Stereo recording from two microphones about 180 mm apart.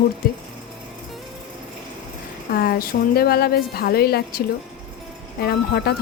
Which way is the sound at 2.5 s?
60° left (ahead or behind).